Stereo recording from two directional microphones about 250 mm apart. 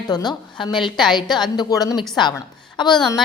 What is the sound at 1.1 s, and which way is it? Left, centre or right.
A woman's voice, centre.